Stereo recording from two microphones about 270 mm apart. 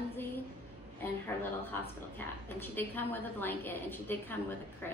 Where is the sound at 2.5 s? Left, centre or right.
Centre.